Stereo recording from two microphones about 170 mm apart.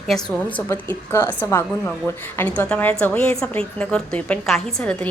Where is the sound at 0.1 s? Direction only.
5° left (ahead or behind).